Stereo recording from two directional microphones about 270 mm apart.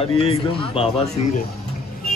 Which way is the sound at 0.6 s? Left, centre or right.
Left.